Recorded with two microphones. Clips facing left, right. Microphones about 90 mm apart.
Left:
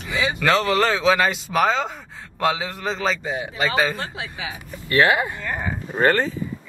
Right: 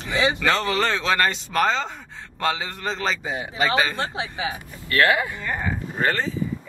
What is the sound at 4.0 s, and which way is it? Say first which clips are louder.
Speech: right 3 dB; 20° right (ahead or behind).